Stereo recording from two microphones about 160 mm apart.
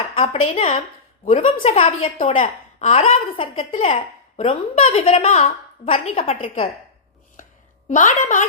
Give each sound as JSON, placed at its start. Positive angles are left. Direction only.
{"t": 0.2, "sound": "a woman's voice", "side_deg": 45}
{"t": 2.3, "sound": "a woman's voice", "side_deg": 50}
{"t": 7.9, "sound": "a woman's voice", "side_deg": 50}